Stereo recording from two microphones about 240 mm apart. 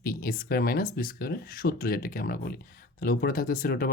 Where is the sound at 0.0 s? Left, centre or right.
Left.